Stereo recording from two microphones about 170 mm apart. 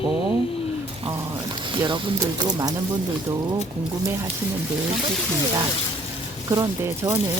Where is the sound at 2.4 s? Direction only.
25° right (ahead or behind).